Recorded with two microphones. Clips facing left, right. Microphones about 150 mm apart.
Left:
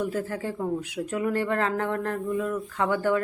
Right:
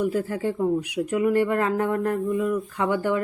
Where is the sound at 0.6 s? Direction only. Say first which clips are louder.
Right 6 dB; 15° right (ahead or behind).